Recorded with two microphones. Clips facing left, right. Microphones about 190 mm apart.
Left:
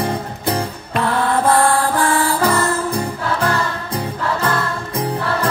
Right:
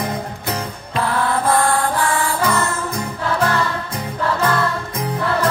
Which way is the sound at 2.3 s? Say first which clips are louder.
Left 3 dB; 30° left (ahead or behind).